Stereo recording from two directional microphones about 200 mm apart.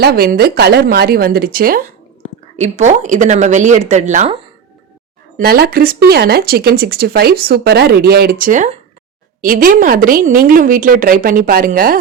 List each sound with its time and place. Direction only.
0.0 s speech: 50° right (ahead or behind)
2.2 s a woman's voice: 35° right (ahead or behind)
5.4 s speech: 50° right (ahead or behind)